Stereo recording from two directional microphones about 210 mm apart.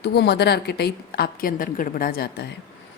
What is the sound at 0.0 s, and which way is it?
A woman's voice, 50° left (ahead or behind).